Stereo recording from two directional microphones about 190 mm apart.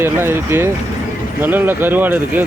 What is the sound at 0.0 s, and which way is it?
Speech, 10° right (ahead or behind).